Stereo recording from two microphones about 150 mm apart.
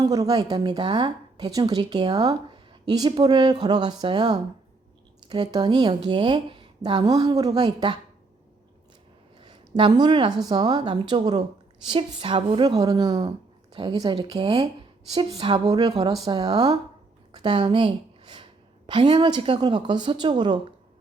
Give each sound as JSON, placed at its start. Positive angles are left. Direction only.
{"t": 0.0, "sound": "speech", "side_deg": -25}
{"t": 9.4, "sound": "speech", "side_deg": -30}
{"t": 17.3, "sound": "a sound", "side_deg": -30}
{"t": 18.9, "sound": "speech", "side_deg": -30}